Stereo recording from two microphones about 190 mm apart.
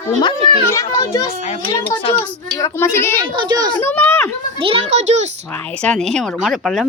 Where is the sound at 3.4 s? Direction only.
20° right (ahead or behind).